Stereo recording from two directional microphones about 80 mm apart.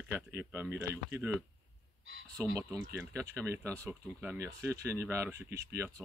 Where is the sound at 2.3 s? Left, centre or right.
Right.